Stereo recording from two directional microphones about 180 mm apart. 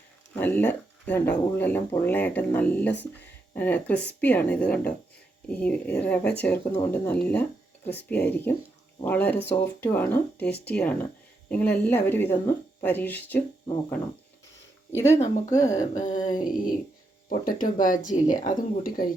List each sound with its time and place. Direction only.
0.3 s speech: 10° left (ahead or behind)
15.1 s speech: 35° left (ahead or behind)
15.5 s speech: 20° left (ahead or behind)
16.0 s speech: 45° left (ahead or behind)